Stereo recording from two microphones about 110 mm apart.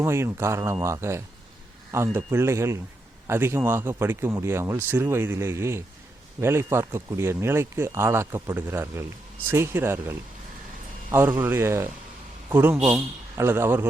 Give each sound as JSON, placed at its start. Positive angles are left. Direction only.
{"t": 0.0, "sound": "a man's voice", "side_deg": -20}